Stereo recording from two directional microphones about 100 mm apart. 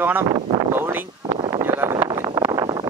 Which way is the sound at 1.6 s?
25° right (ahead or behind).